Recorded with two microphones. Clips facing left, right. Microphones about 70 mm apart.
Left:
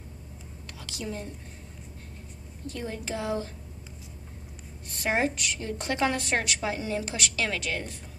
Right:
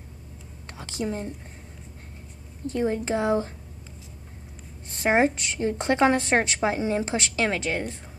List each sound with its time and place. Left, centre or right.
0.7 s a woman's voice: right
2.6 s a woman's voice: right
4.8 s a woman's voice: right